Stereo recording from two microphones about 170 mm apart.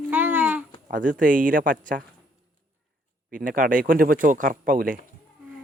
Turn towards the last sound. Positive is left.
turn(degrees=-55)  # may be behind; listen again after turning